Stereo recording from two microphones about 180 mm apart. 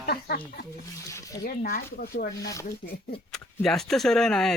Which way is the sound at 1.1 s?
15° left (ahead or behind).